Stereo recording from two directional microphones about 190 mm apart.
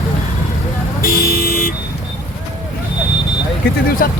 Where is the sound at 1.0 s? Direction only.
50° left (ahead or behind).